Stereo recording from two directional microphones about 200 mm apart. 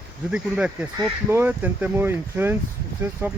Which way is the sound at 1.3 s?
10° right (ahead or behind).